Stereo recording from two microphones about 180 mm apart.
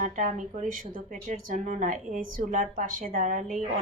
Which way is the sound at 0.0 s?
45° right (ahead or behind).